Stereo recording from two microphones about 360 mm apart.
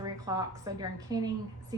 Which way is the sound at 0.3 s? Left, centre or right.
Centre.